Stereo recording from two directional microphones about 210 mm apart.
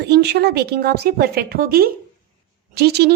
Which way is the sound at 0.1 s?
50° right (ahead or behind).